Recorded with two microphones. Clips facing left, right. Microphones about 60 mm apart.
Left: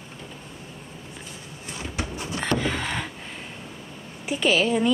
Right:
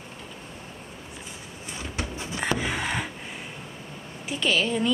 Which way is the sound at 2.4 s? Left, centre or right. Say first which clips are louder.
Left 2 dB; centre.